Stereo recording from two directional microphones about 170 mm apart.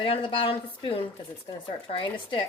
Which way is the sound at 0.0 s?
30° left (ahead or behind).